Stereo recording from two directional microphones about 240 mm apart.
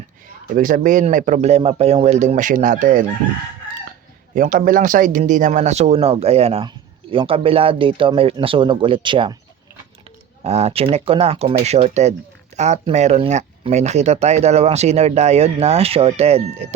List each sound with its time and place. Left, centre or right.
0.5 s speech: right
4.4 s speech: right
10.4 s speech: right